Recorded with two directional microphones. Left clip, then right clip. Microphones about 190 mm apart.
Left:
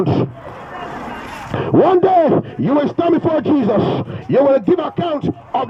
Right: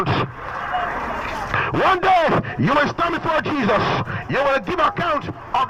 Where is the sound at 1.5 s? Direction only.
35° left (ahead or behind).